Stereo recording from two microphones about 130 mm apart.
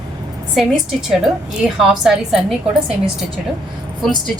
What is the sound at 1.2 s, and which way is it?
A woman's voice, 5° right (ahead or behind).